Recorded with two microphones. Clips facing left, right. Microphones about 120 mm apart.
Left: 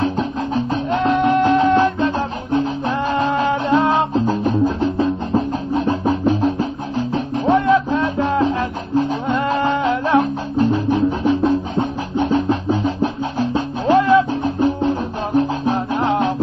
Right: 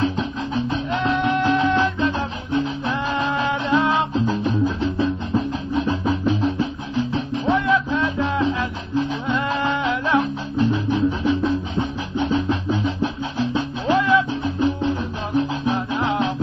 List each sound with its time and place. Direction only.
0.0 s music: 45° left (ahead or behind)